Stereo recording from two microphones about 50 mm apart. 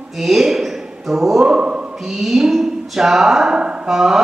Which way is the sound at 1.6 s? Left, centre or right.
Right.